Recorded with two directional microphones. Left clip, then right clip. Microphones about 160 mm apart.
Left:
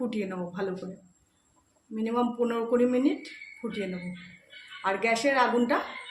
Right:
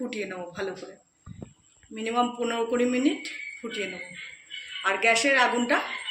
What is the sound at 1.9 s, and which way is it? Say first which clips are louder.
Speech: right 2 dB; 50° left (ahead or behind).